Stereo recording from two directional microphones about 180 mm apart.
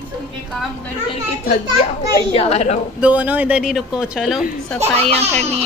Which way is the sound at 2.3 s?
35° left (ahead or behind).